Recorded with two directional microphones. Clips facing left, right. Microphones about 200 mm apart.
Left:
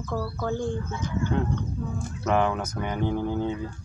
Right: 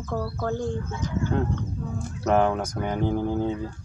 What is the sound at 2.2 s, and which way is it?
Speech, 40° right (ahead or behind).